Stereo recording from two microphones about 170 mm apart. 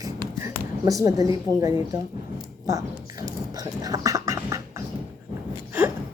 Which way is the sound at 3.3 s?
20° right (ahead or behind).